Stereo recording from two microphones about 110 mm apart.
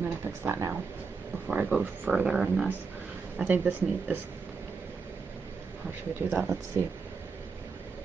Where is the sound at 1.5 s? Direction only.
10° right (ahead or behind).